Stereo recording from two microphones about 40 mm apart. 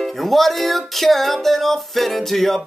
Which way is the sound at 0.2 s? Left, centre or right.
Centre.